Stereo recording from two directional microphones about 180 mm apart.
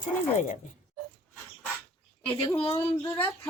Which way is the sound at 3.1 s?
10° left (ahead or behind).